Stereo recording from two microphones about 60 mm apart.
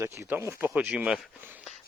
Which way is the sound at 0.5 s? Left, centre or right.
Right.